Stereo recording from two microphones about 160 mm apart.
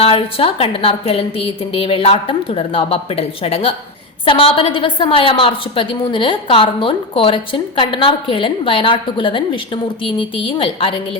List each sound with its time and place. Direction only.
0.0 s a woman's voice: 35° left (ahead or behind)